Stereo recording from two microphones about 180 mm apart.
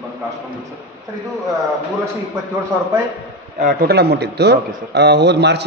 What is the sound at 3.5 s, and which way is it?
A man's voice, 55° right (ahead or behind).